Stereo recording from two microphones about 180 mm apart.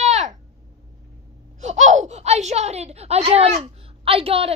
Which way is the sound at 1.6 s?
40° right (ahead or behind).